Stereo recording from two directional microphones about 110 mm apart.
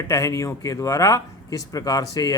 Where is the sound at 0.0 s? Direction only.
25° left (ahead or behind).